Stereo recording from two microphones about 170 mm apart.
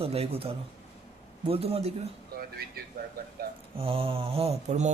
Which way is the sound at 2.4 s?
60° right (ahead or behind).